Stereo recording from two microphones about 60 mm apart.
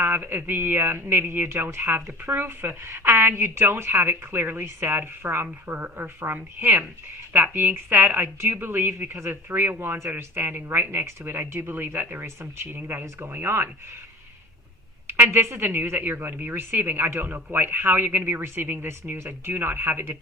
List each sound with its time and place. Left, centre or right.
0.0 s speech: right
12.2 s speech: right
15.1 s speech: right